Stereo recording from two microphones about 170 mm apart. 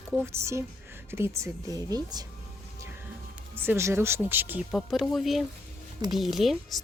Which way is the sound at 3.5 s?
15° right (ahead or behind).